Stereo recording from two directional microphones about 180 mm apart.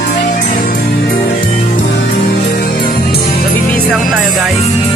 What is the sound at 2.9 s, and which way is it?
Music, 60° left (ahead or behind).